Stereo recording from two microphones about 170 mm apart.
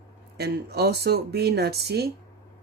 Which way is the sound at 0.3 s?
70° right (ahead or behind).